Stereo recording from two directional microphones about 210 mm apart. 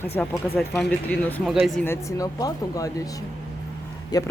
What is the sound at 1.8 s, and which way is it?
Speech, 15° left (ahead or behind).